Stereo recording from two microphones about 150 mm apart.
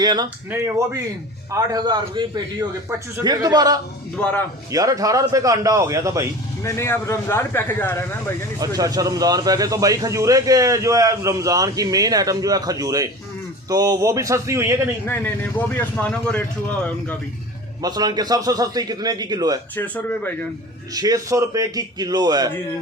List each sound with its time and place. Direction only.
0.0 s speech: 25° right (ahead or behind)
1.5 s speech: 25° right (ahead or behind)
4.2 s speech: 10° left (ahead or behind)
4.7 s speech: 25° right (ahead or behind)
6.6 s speech: 20° left (ahead or behind)
8.5 s speech: 25° right (ahead or behind)
15.0 s speech: 15° left (ahead or behind)
17.8 s speech: 25° right (ahead or behind)
19.7 s speech: 10° left (ahead or behind)
20.9 s speech: 25° right (ahead or behind)